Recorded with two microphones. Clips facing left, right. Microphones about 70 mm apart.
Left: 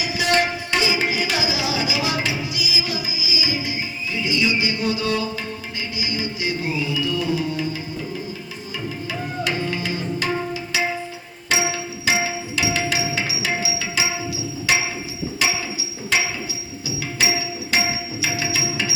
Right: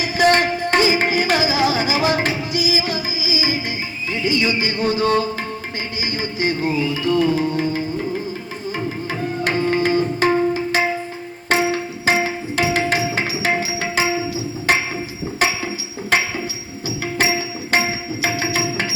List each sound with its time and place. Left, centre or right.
0.0 s music: right
4.1 s a sound: right
6.0 s music: right
9.4 s tabla: right
11.4 s music: right